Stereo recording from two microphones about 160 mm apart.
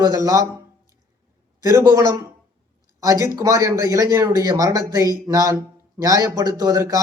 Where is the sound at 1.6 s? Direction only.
20° right (ahead or behind).